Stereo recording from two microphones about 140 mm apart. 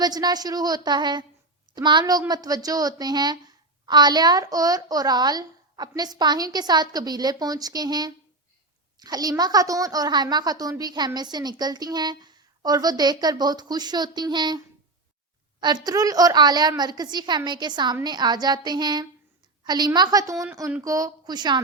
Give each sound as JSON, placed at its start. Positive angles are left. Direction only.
{"t": 0.0, "sound": "a woman's voice", "side_deg": -30}
{"t": 15.6, "sound": "a woman's voice", "side_deg": -30}